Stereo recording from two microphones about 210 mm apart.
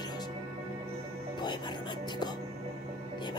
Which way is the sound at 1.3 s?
20° left (ahead or behind).